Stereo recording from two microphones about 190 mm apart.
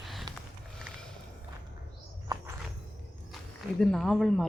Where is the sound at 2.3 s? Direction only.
20° right (ahead or behind).